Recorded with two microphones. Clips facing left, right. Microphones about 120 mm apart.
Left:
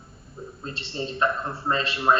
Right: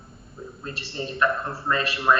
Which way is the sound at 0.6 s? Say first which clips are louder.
Left 1 dB; 25° left (ahead or behind).